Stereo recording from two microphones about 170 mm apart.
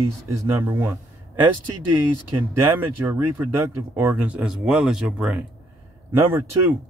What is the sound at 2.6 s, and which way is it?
Speech, 15° right (ahead or behind).